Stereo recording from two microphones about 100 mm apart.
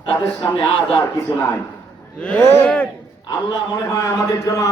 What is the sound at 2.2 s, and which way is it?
Speech, 15° left (ahead or behind).